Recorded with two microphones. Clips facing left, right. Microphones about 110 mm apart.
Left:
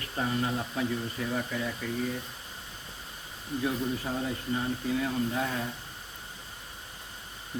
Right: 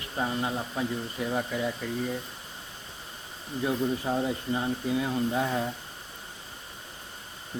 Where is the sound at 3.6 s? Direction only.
25° right (ahead or behind).